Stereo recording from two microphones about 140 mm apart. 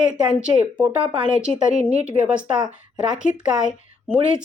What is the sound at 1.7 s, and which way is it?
Speech, 50° right (ahead or behind).